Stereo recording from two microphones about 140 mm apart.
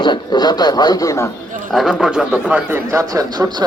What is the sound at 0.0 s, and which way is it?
A man's voice, 30° left (ahead or behind).